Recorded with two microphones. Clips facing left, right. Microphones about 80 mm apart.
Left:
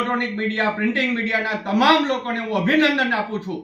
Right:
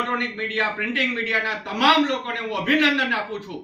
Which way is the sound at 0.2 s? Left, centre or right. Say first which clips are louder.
Left 3 dB; left.